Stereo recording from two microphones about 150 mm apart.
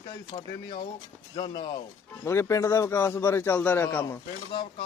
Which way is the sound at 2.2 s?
20° left (ahead or behind).